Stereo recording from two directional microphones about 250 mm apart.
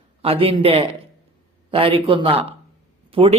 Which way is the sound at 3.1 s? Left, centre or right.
Right.